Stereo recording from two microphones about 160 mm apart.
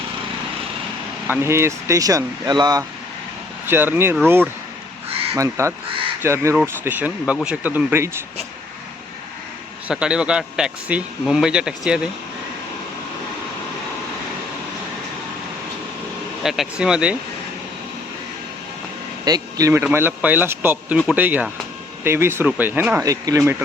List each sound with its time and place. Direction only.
1.3 s speech: 15° right (ahead or behind)
3.7 s speech: 15° right (ahead or behind)
5.3 s speech: 15° right (ahead or behind)
9.9 s speech: 5° right (ahead or behind)
16.4 s speech: centre (ahead or behind)
19.2 s speech: 25° right (ahead or behind)
23.4 s speech: 10° right (ahead or behind)